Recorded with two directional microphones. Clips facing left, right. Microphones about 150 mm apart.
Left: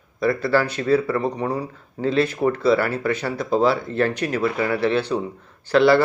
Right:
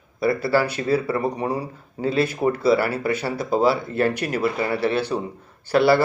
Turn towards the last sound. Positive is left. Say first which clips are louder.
# left 2 dB
turn(degrees=-10)  # may be behind; listen again after turning